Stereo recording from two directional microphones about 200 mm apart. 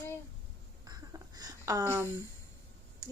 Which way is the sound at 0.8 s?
20° right (ahead or behind).